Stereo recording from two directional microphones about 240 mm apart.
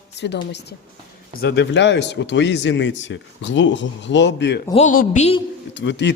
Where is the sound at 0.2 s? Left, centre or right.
Left.